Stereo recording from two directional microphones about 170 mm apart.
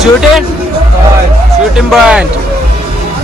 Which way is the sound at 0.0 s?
Centre (ahead or behind).